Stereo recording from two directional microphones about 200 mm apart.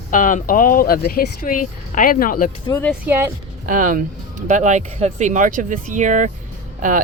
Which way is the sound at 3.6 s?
40° right (ahead or behind).